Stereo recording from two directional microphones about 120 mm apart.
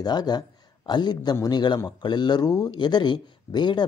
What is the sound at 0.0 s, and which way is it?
Speech, 35° left (ahead or behind).